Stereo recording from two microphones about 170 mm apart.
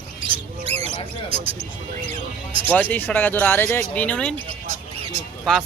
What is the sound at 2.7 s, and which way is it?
Speech, 10° left (ahead or behind).